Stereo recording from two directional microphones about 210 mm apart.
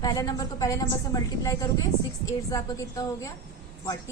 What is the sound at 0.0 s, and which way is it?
A woman's voice, 20° left (ahead or behind).